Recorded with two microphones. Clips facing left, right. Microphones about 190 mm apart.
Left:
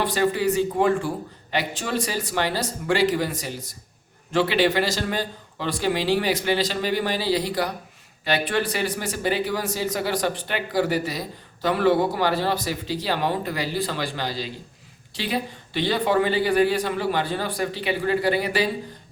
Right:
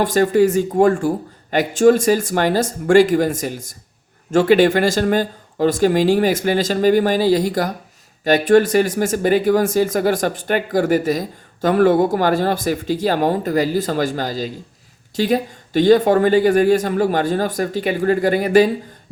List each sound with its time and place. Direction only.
0.0 s speech: 45° right (ahead or behind)